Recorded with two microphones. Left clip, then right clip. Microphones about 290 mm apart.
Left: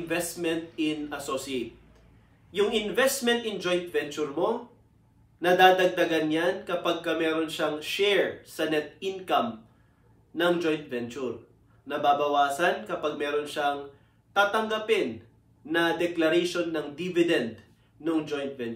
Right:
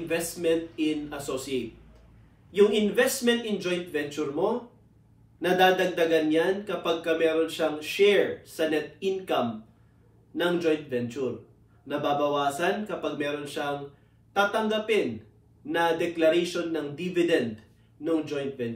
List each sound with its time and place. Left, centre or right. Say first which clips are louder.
0.4 s a man's voice: right 3 dB; centre
2.5 s a man's voice: right 4 dB; centre